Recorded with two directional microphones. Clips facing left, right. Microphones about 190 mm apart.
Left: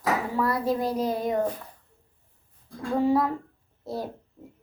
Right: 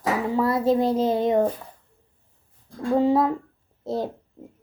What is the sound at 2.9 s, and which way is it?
A child's voice, 20° right (ahead or behind).